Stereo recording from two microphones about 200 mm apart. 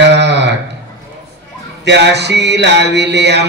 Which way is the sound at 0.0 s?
60° right (ahead or behind).